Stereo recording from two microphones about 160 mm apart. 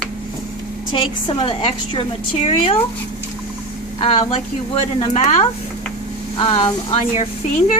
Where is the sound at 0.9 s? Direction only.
30° left (ahead or behind).